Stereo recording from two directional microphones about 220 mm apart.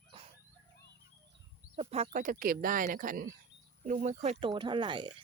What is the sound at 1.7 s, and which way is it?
Speech, 30° right (ahead or behind).